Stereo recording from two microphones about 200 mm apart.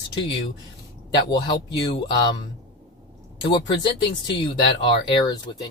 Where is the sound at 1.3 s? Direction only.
20° left (ahead or behind).